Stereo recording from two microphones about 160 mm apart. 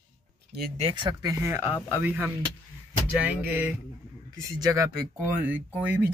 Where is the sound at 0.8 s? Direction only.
30° right (ahead or behind); by 2.3 s 10° right (ahead or behind).